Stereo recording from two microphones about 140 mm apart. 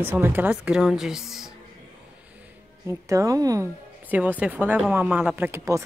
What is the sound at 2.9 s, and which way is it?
Speech, 20° right (ahead or behind).